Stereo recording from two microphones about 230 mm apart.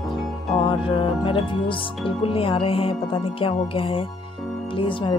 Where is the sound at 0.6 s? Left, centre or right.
Left.